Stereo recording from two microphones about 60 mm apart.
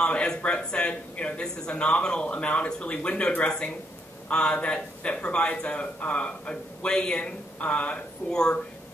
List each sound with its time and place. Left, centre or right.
0.0 s a man's voice: centre